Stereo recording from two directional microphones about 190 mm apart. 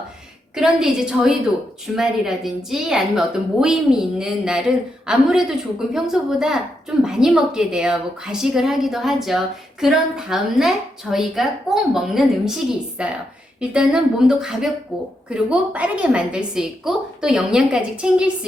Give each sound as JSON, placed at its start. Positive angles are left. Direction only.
{"t": 0.5, "sound": "a woman's voice", "side_deg": -5}